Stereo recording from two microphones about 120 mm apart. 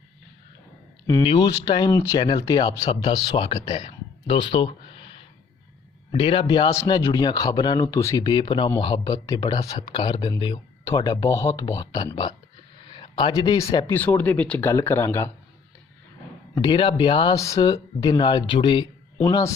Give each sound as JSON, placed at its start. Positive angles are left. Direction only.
{"t": 1.2, "sound": "speech", "side_deg": 45}
{"t": 2.9, "sound": "speech", "side_deg": 45}
{"t": 7.9, "sound": "speech", "side_deg": 25}
{"t": 12.9, "sound": "speech", "side_deg": 40}
{"t": 13.9, "sound": "speech", "side_deg": 15}
{"t": 14.7, "sound": "speech", "side_deg": 25}
{"t": 16.6, "sound": "speech", "side_deg": 40}
{"t": 17.3, "sound": "speech", "side_deg": 30}
{"t": 19.3, "sound": "speech", "side_deg": 25}